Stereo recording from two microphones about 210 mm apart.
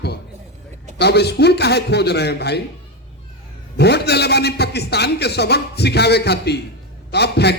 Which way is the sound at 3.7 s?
50° left (ahead or behind).